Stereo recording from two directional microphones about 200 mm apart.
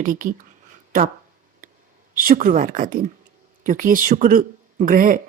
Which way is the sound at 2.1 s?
45° right (ahead or behind).